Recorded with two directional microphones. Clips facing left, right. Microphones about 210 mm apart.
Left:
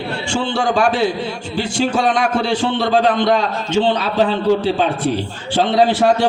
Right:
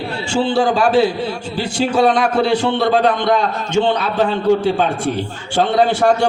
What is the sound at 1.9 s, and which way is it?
Speech, 60° right (ahead or behind).